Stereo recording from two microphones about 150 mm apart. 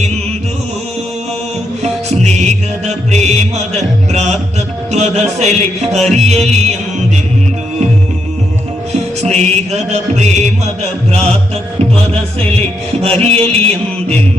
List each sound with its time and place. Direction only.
1.8 s music: 50° right (ahead or behind)
9.2 s music: 45° right (ahead or behind)